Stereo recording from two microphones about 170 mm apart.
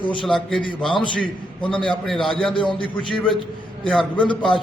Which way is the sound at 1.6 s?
30° left (ahead or behind).